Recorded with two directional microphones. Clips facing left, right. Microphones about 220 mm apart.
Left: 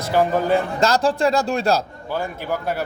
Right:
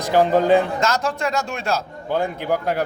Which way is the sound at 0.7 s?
35° left (ahead or behind).